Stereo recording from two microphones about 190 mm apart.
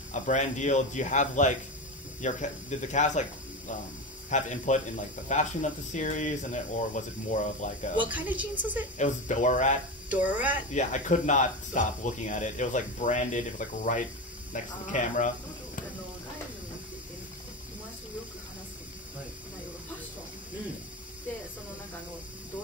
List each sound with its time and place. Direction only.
0.1 s speech: 40° left (ahead or behind)
8.0 s a woman's voice: 10° right (ahead or behind)
8.9 s speech: 40° left (ahead or behind)
10.0 s a woman's voice: 10° right (ahead or behind)
10.7 s speech: 40° left (ahead or behind)